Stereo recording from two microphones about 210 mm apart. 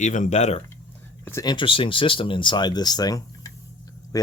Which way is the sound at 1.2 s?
15° left (ahead or behind).